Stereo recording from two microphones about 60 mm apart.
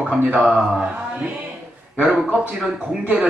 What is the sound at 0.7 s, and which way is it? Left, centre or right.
Mantra, centre.